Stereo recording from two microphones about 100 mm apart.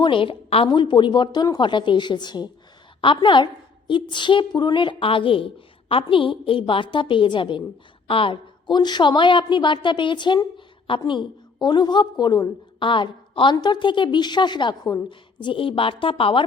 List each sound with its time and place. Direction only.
0.0 s a woman's voice: 60° left (ahead or behind)